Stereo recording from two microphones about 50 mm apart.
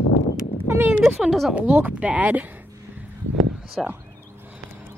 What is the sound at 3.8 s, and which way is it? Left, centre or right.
Speech, centre.